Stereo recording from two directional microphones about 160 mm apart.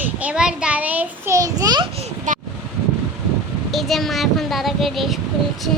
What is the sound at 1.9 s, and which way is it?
Speech, 40° right (ahead or behind).